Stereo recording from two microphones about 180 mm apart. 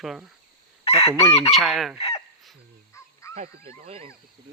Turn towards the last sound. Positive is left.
turn(degrees=-30)  # may be behind; listen again after turning